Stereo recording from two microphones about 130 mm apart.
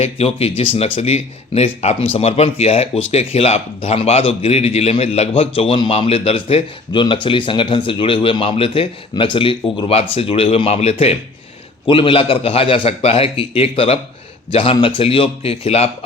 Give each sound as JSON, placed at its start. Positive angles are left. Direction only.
{"t": 0.0, "sound": "speech", "side_deg": 50}